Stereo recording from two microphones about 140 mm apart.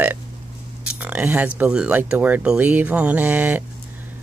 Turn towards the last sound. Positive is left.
turn(degrees=-10)  # may be behind; listen again after turning